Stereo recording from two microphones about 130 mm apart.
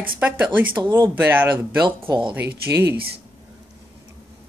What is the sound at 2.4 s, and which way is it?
Speech, 15° right (ahead or behind).